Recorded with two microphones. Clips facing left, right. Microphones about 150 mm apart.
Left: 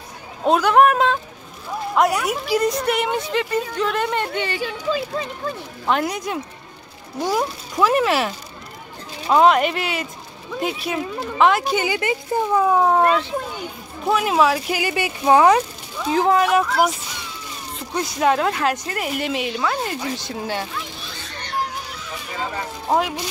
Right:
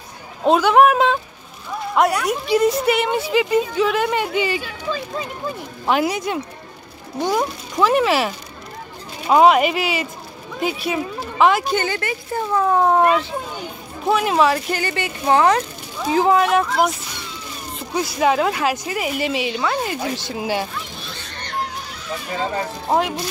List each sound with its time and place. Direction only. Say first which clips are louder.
0.5 s speech: right 1 dB; centre (ahead or behind)
9.3 s speech: right 2 dB; 5° right (ahead or behind); by 12.7 s 15° left (ahead or behind)
12.7 s speech: right 4 dB; centre (ahead or behind)
16.1 s speech: right 1 dB; centre (ahead or behind)
22.8 s speech: even; centre (ahead or behind)